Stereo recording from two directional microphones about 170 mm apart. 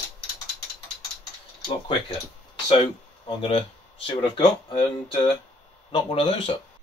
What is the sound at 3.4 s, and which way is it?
Speech, 35° left (ahead or behind).